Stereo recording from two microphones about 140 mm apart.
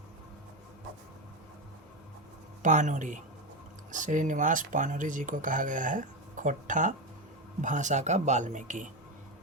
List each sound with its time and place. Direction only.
2.6 s speech: 60° right (ahead or behind)